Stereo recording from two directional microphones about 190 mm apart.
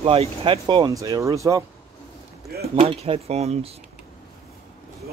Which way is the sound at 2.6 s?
30° right (ahead or behind).